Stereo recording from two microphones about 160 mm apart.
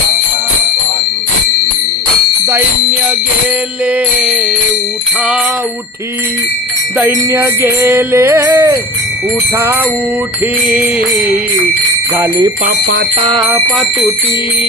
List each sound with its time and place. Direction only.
2.5 s music: 15° right (ahead or behind)
6.9 s music: 15° right (ahead or behind)
10.4 s jingle bell: 5° right (ahead or behind)
12.1 s music: 15° right (ahead or behind)
13.1 s music: 30° right (ahead or behind)
13.7 s jingle bell: centre (ahead or behind)